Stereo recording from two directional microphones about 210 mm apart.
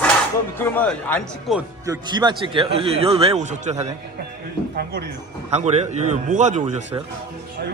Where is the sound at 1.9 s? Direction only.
20° right (ahead or behind).